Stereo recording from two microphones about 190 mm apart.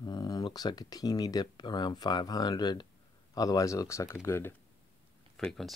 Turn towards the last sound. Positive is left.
turn(degrees=0)  # may be behind; listen again after turning